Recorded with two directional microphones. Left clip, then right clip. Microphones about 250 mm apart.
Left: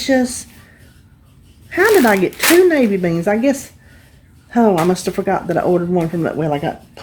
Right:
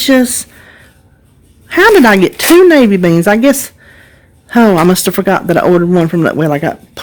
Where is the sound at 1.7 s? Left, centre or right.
Right.